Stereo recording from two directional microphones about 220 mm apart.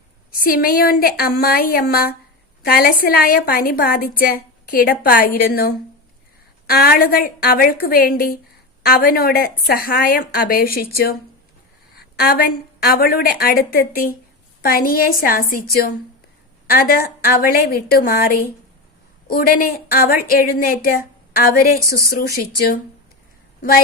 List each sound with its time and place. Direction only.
0.3 s a woman's voice: 40° left (ahead or behind)